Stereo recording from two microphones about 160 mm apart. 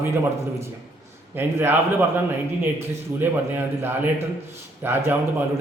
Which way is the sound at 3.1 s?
15° right (ahead or behind).